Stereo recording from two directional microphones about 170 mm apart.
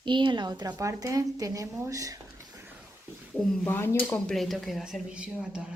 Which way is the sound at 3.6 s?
15° left (ahead or behind).